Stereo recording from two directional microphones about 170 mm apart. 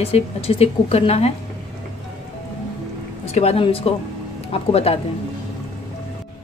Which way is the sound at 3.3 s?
35° left (ahead or behind).